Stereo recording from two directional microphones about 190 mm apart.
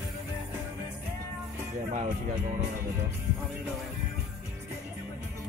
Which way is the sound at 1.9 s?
45° right (ahead or behind).